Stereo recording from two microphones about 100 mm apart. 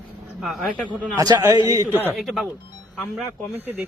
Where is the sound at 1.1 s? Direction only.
40° right (ahead or behind).